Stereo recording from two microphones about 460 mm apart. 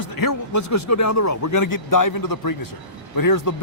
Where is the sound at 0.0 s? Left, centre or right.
Left.